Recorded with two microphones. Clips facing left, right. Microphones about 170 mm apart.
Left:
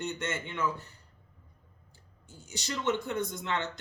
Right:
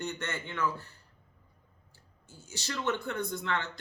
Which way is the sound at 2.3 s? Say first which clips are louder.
Left 2 dB; 20° left (ahead or behind).